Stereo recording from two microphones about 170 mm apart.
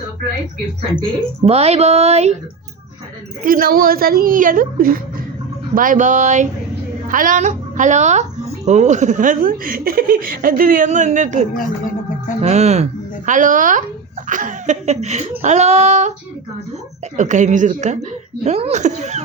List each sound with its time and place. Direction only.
1.5 s speech: 35° right (ahead or behind)
3.4 s a woman's voice: 60° right (ahead or behind)
11.5 s speech: 55° left (ahead or behind)
12.4 s a woman's voice: 40° right (ahead or behind)
17.2 s a woman's voice: 45° right (ahead or behind)